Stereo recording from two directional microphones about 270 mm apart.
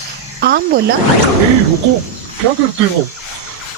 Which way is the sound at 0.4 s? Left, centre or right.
Right.